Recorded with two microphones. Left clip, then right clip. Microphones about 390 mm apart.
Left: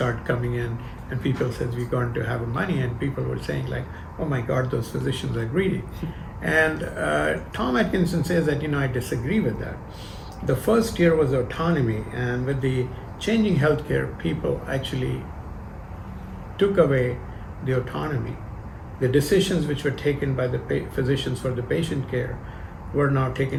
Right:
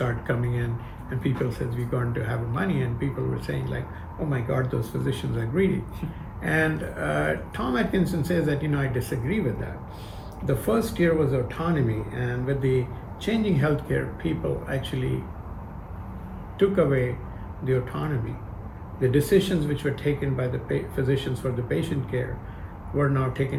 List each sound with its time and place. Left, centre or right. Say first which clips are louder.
0.0 s a sound: left 3 dB; left
1.2 s speech: left 3 dB; left
10.4 s speech: left 4 dB; left
16.6 s speech: left 2 dB; left